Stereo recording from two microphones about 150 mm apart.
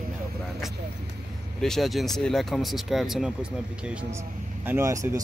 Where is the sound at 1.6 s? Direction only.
Centre (ahead or behind); by 5.1 s 20° right (ahead or behind).